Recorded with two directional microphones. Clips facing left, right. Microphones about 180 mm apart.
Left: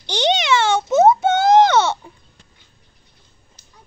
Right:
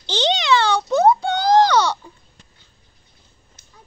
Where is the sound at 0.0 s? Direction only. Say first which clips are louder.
Left 2 dB; 15° left (ahead or behind).